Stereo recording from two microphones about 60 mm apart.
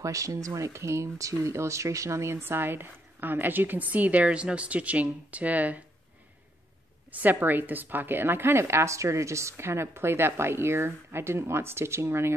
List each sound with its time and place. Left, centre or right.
0.0 s speech: right
0.6 s speech: right
7.1 s a woman's voice: right